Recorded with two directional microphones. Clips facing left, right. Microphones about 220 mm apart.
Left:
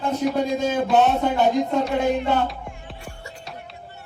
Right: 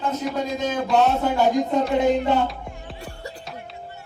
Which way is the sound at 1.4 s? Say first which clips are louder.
Right 2 dB; 10° right (ahead or behind).